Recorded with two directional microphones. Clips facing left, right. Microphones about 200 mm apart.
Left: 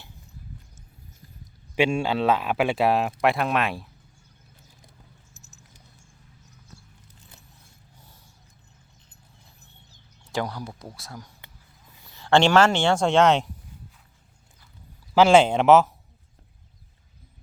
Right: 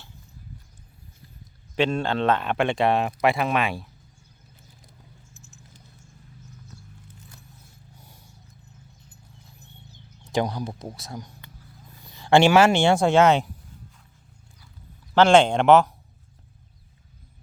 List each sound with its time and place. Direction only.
1.7 s speech: 10° left (ahead or behind)
5.3 s patter: 40° left (ahead or behind)
10.3 s speech: 20° right (ahead or behind); by 13.5 s centre (ahead or behind)
15.1 s speech: 5° left (ahead or behind)